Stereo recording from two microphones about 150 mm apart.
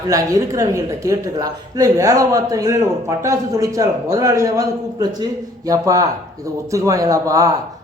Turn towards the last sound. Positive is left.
turn(degrees=-20)  # may be behind; listen again after turning